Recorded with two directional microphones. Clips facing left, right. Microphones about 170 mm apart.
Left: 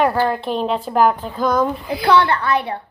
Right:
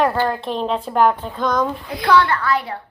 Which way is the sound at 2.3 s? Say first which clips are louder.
Left 2 dB; 25° left (ahead or behind).